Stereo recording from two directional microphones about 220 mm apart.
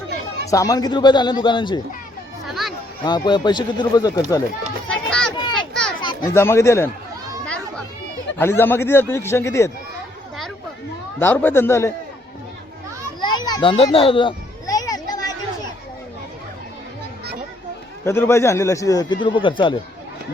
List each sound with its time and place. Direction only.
0.5 s speech: 15° left (ahead or behind)
2.5 s music: centre (ahead or behind)
3.0 s speech: 20° left (ahead or behind)
4.9 s a sound: 5° left (ahead or behind)
5.4 s children playing: 20° left (ahead or behind)
6.0 s speech: 15° left (ahead or behind)
8.4 s speech: 10° left (ahead or behind)
11.2 s speech: 10° left (ahead or behind)
13.2 s children playing: 20° left (ahead or behind)
18.0 s speech: 10° left (ahead or behind)